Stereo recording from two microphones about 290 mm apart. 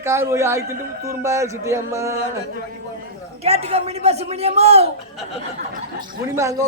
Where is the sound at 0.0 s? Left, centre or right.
Centre.